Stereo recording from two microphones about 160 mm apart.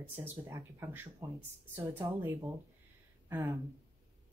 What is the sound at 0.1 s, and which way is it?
Speech, 15° right (ahead or behind).